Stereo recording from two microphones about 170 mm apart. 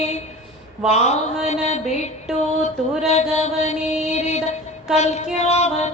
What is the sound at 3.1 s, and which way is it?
Mantra, 40° left (ahead or behind).